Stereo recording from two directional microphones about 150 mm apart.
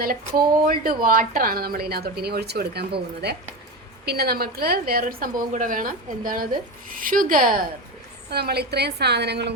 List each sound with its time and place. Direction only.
0.0 s a woman's voice: 75° right (ahead or behind)
8.3 s speech: 90° right